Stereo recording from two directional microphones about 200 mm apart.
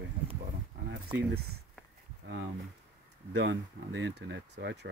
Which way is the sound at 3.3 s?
65° right (ahead or behind).